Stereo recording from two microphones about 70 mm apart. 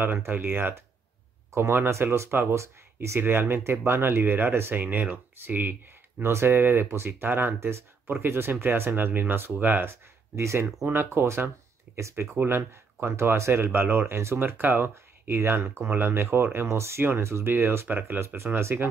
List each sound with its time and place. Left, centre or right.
0.0 s speech: right
9.8 s speech: right
10.9 s speech: right